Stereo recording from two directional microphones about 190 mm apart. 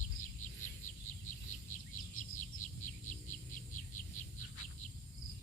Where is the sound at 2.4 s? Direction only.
40° left (ahead or behind).